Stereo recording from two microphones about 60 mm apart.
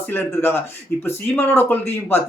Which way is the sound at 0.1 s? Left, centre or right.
Left.